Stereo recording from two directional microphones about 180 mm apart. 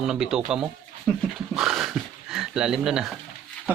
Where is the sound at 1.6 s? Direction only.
Centre (ahead or behind).